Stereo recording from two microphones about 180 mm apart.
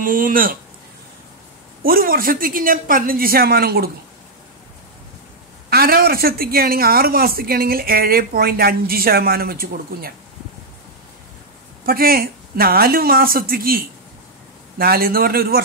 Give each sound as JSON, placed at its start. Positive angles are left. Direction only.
{"t": 0.0, "sound": "speech", "side_deg": -50}
{"t": 1.8, "sound": "speech", "side_deg": -55}
{"t": 5.7, "sound": "speech", "side_deg": -55}
{"t": 11.8, "sound": "speech", "side_deg": -55}